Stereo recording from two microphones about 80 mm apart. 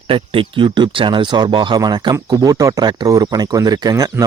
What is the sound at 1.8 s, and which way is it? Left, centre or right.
Speech, right.